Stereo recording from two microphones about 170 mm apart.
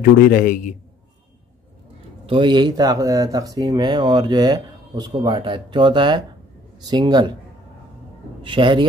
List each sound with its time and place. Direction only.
0.2 s a man's voice: 60° left (ahead or behind)
2.2 s speech: 30° right (ahead or behind)
8.4 s a man's voice: 30° right (ahead or behind)